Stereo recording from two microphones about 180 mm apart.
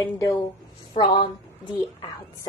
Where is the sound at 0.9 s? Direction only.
40° left (ahead or behind).